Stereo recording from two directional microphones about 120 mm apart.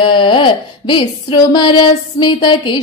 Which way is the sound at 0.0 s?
45° left (ahead or behind).